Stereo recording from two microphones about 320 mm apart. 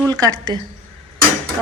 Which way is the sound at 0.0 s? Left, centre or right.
Centre.